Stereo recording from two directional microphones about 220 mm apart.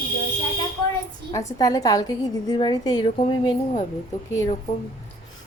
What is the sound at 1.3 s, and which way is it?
A woman's voice, 15° left (ahead or behind).